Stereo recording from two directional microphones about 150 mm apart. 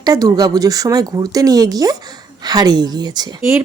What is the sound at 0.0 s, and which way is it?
Speech, 25° right (ahead or behind).